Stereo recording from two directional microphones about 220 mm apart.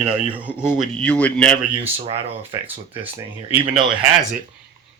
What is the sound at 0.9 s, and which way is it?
Speech, 5° left (ahead or behind).